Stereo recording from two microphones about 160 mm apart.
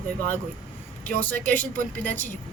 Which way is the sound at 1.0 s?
10° left (ahead or behind).